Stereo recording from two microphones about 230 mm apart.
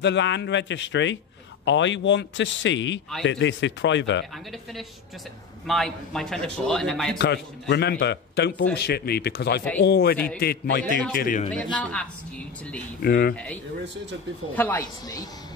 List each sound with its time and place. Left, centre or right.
0.0 s a man's voice: left
5.7 s a man's voice: centre
7.2 s a man's voice: left
11.5 s a man's voice: centre
13.0 s speech: left
14.5 s a woman's voice: centre